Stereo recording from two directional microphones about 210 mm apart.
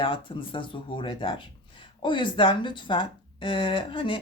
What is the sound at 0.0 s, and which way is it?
Speech, 25° left (ahead or behind).